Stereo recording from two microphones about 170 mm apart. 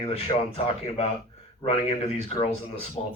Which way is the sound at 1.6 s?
35° left (ahead or behind).